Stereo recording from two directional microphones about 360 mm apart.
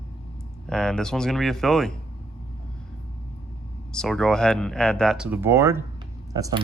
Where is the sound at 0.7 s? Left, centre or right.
Centre.